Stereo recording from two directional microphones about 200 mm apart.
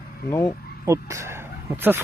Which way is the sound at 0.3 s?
15° left (ahead or behind).